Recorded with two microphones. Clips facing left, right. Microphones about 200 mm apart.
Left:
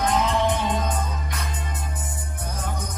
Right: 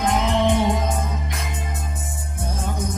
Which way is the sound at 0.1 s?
25° right (ahead or behind).